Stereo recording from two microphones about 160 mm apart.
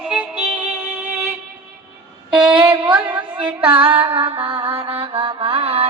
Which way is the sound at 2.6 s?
25° right (ahead or behind).